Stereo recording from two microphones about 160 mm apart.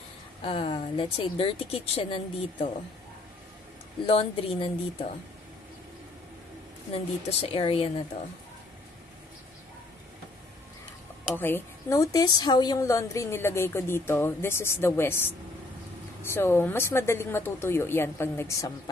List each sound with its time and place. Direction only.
0.4 s a woman's voice: 35° left (ahead or behind)
4.0 s a woman's voice: 35° left (ahead or behind)
6.9 s a woman's voice: 40° left (ahead or behind)
11.3 s a woman's voice: 15° left (ahead or behind)